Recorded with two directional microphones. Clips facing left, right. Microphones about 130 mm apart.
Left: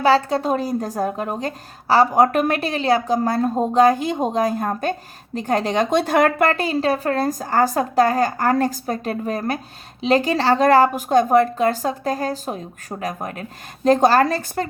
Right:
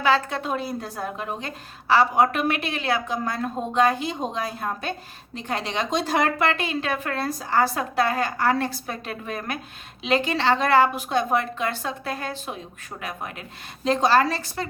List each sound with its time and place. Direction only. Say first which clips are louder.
0.0 s a woman's voice: left 6 dB; 35° left (ahead or behind)